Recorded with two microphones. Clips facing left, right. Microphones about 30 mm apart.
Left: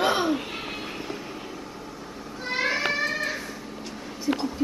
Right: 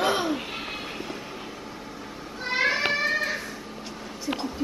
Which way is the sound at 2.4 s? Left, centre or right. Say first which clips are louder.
Right 2 dB; centre.